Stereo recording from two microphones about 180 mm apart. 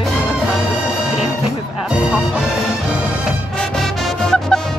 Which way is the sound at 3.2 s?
Centre (ahead or behind).